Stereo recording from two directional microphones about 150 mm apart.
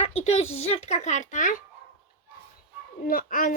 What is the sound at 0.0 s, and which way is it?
Speech, 45° left (ahead or behind).